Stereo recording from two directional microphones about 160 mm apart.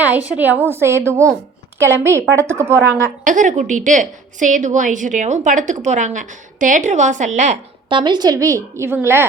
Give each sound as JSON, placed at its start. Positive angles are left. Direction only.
{"t": 0.0, "sound": "a woman's voice", "side_deg": -10}
{"t": 3.2, "sound": "a woman's voice", "side_deg": -55}
{"t": 7.9, "sound": "a woman's voice", "side_deg": -30}